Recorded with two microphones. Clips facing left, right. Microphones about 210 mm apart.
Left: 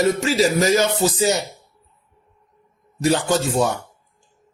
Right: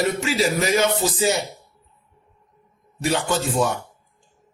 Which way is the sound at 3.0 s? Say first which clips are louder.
Left 4 dB; 40° left (ahead or behind).